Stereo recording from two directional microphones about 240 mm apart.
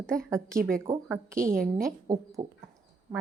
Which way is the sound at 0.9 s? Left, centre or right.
Centre.